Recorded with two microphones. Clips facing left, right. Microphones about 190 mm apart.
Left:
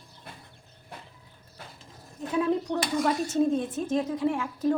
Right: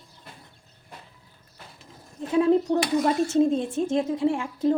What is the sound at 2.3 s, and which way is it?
Speech, 25° right (ahead or behind).